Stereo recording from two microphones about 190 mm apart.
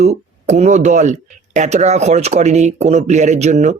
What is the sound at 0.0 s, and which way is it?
Speech, 35° right (ahead or behind).